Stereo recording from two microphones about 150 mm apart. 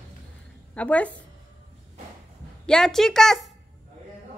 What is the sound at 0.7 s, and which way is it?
Speech, 10° left (ahead or behind).